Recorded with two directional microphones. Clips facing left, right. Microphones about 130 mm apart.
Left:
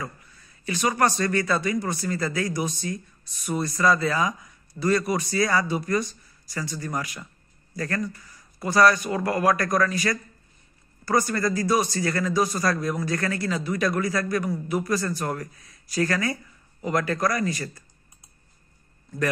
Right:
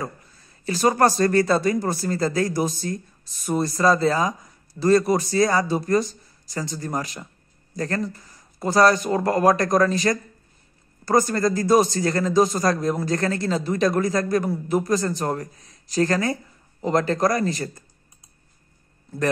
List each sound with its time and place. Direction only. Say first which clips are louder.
0.0 s speech: right 4 dB; 35° right (ahead or behind)
6.8 s a man's voice: right 3 dB; 30° right (ahead or behind)
11.2 s a man's voice: right 4 dB; 25° right (ahead or behind)